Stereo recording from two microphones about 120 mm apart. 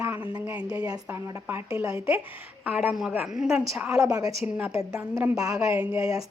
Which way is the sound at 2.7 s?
15° right (ahead or behind).